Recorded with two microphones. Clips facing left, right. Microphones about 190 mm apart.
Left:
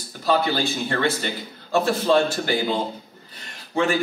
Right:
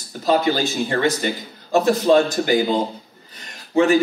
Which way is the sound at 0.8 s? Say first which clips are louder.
Right 4 dB; 15° right (ahead or behind).